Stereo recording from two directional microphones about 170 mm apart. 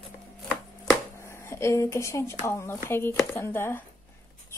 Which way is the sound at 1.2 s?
15° left (ahead or behind).